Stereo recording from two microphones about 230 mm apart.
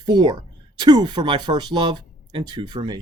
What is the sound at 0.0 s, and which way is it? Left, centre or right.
Speech, centre.